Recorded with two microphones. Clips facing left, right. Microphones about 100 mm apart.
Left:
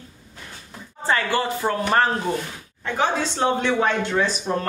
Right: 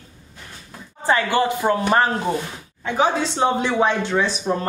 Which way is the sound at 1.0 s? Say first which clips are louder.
Right 3 dB; 20° right (ahead or behind).